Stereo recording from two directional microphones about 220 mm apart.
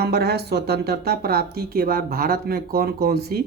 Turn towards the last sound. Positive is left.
turn(degrees=-45)  # may be behind; listen again after turning